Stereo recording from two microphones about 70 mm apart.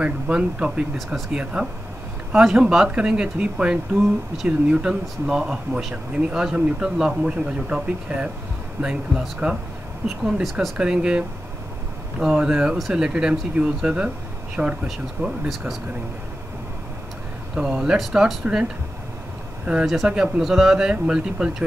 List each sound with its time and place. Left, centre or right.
0.0 s speech: centre
9.4 s speech: centre
10.4 s speech: centre
10.8 s speech: centre
14.9 s speech: centre
17.6 s speech: centre